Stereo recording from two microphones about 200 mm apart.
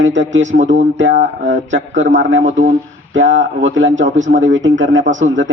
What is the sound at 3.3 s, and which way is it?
A man's voice, 70° right (ahead or behind).